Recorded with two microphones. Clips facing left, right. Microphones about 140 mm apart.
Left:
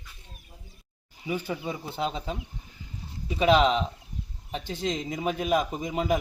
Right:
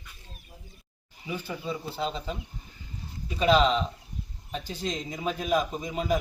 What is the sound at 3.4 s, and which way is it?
A man's voice, 15° left (ahead or behind).